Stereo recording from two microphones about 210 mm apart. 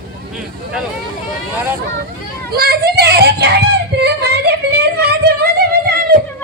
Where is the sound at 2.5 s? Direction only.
45° right (ahead or behind).